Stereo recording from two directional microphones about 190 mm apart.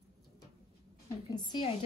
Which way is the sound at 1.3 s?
25° left (ahead or behind).